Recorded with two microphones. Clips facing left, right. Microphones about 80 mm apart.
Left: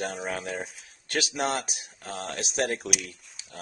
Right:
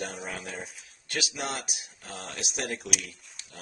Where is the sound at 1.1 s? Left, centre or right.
Left.